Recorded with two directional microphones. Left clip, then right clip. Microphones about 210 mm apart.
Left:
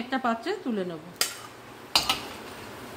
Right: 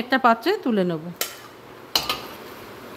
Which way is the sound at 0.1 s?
35° right (ahead or behind).